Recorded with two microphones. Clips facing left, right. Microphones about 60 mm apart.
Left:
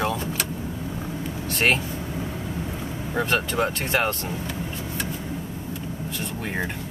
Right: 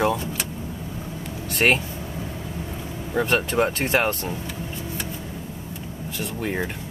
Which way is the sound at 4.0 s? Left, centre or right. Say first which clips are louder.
Right 1 dB; centre.